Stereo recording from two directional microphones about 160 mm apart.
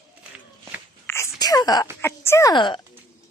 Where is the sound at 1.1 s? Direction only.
20° left (ahead or behind).